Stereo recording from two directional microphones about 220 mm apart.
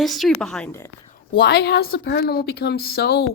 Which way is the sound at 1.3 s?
50° left (ahead or behind).